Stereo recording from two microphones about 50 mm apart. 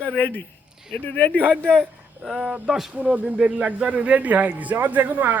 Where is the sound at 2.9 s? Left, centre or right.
Right.